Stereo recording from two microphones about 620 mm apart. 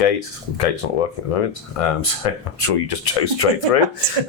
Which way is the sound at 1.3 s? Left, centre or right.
Left.